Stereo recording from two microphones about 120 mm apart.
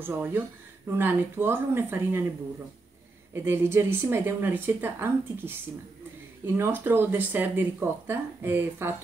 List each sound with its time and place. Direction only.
0.0 s speech: 15° right (ahead or behind)
3.3 s speech: 20° right (ahead or behind)